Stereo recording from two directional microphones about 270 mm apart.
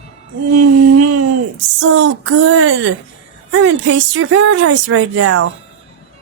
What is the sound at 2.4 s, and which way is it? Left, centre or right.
Speech, right.